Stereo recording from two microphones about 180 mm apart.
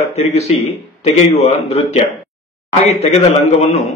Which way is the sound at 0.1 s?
35° left (ahead or behind).